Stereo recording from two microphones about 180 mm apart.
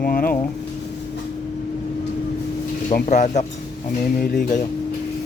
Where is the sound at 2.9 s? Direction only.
45° left (ahead or behind).